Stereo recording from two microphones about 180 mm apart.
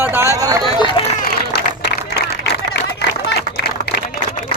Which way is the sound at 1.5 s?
65° left (ahead or behind).